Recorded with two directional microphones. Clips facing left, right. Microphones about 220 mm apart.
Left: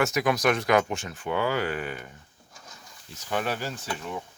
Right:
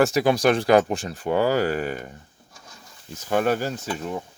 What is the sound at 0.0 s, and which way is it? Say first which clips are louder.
Speech: right 5 dB; 30° right (ahead or behind).